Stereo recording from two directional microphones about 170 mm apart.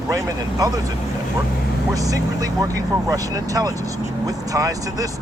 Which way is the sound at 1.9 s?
20° right (ahead or behind).